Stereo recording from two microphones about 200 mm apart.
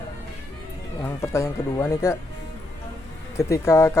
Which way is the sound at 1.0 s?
15° left (ahead or behind).